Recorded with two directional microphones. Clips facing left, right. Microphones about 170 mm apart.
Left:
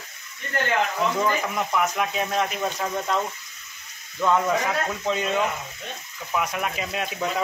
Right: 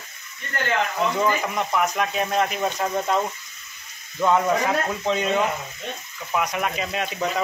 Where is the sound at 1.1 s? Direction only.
Centre (ahead or behind).